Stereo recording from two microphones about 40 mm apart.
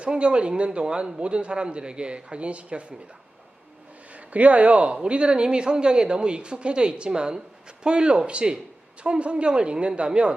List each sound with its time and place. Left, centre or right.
0.0 s speech: right
4.3 s speech: right